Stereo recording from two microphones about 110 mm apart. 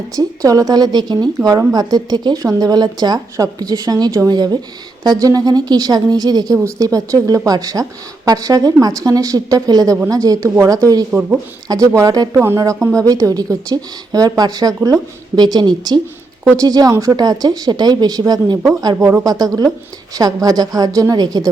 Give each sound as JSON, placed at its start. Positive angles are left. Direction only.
{"t": 0.2, "sound": "speech", "side_deg": -35}